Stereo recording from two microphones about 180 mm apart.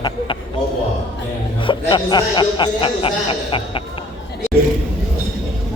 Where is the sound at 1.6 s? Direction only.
25° left (ahead or behind).